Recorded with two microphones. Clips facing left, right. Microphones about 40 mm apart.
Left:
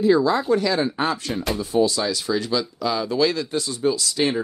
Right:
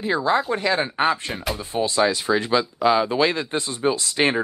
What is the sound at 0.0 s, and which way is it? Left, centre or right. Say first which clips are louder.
Speech: left 3 dB; right.